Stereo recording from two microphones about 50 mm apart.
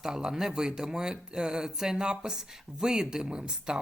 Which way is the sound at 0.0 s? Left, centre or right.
Centre.